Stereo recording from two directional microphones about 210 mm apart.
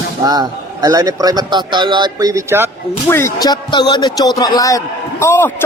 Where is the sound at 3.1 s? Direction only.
10° left (ahead or behind).